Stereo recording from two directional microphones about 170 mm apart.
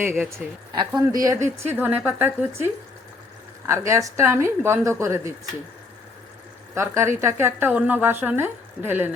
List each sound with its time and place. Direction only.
0.0 s a woman's voice: 15° right (ahead or behind)
0.7 s speech: 25° right (ahead or behind)
1.5 s a woman's voice: 10° right (ahead or behind)
6.7 s a woman's voice: 15° right (ahead or behind)